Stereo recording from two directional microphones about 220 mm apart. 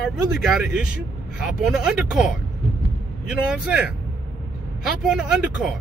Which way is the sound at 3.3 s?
5° right (ahead or behind).